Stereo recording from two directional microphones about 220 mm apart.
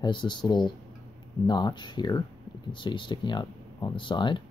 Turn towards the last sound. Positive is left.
turn(degrees=20)  # may be behind; listen again after turning